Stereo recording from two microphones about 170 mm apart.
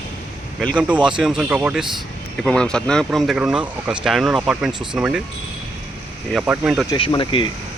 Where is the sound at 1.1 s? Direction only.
5° right (ahead or behind).